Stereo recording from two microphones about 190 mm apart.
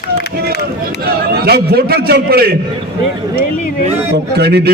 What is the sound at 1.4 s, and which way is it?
A man's voice, 55° right (ahead or behind).